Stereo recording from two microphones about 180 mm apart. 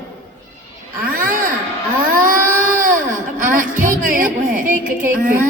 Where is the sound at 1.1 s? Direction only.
50° right (ahead or behind).